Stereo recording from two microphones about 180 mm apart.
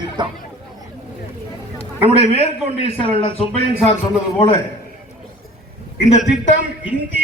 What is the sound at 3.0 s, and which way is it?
Speech, 30° left (ahead or behind).